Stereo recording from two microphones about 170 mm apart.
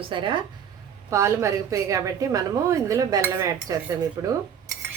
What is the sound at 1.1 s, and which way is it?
A woman's voice, 15° right (ahead or behind).